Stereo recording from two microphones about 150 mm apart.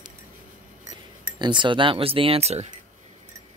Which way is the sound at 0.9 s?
30° right (ahead or behind).